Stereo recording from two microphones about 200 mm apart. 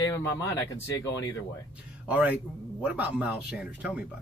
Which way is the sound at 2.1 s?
5° right (ahead or behind).